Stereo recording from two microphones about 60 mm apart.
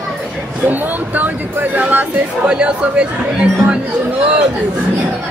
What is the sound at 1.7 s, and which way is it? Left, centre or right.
Music, right.